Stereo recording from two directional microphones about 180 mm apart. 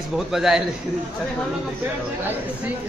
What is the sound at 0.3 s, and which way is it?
Speech, 5° right (ahead or behind).